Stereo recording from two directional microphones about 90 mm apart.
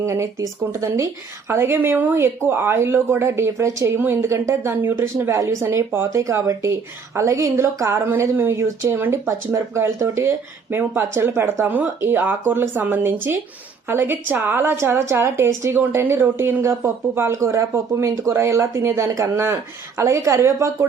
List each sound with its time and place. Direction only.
0.0 s speech: 30° right (ahead or behind)
6.1 s speech: 35° right (ahead or behind)